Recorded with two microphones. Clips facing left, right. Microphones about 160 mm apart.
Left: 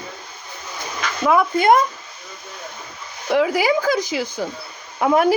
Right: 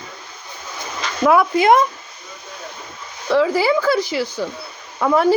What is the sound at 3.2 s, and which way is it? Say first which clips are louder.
Speech: right 2 dB; 15° left (ahead or behind).